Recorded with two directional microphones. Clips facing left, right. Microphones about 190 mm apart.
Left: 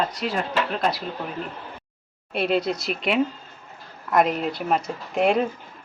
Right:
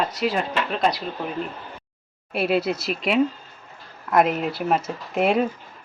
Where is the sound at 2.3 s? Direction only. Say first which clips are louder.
Right 1 dB; 5° right (ahead or behind).